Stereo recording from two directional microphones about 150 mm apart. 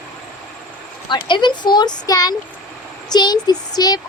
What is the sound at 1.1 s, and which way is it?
A woman's voice, 30° left (ahead or behind).